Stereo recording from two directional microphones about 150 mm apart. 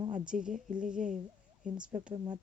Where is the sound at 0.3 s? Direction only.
55° right (ahead or behind).